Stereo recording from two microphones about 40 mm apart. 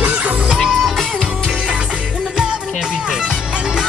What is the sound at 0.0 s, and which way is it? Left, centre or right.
Music, right.